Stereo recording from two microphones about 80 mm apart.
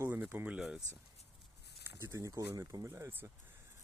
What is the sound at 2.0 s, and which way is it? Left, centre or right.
Speech, right.